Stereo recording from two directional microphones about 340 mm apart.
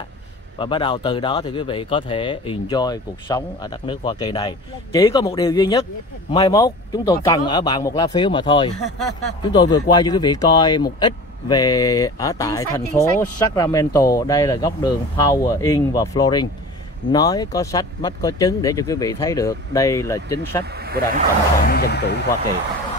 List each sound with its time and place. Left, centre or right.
0.6 s speech: centre
8.8 s speech: centre
9.4 s speech: centre
20.7 s speech: right
21.6 s speech: left